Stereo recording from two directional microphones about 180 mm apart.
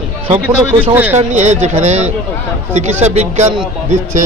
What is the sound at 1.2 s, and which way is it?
A man's voice, 40° right (ahead or behind).